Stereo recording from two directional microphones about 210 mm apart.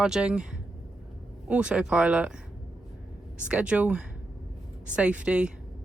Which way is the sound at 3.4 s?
5° right (ahead or behind).